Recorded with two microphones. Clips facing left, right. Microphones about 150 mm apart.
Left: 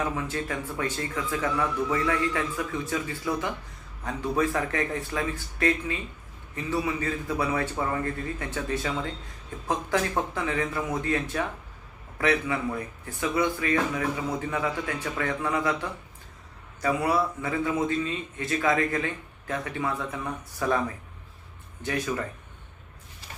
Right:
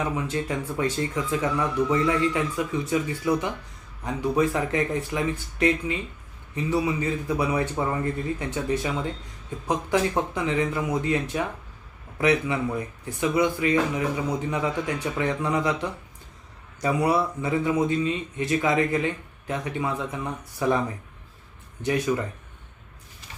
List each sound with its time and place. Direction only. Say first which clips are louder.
0.0 s speech: right 2 dB; 20° right (ahead or behind)